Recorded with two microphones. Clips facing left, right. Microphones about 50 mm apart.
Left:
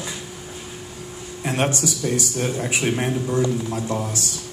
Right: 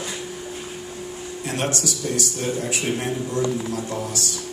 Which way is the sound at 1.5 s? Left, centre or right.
Left.